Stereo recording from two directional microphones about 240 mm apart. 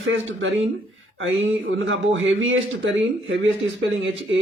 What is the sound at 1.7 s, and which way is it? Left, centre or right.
A man's voice, right.